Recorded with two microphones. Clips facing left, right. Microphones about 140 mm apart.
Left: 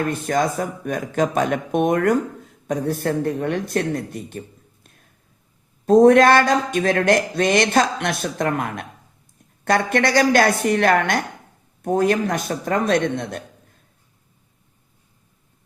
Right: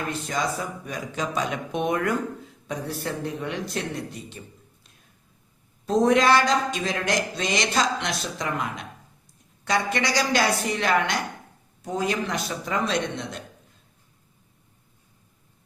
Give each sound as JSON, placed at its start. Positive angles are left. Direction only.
{"t": 0.0, "sound": "speech", "side_deg": 50}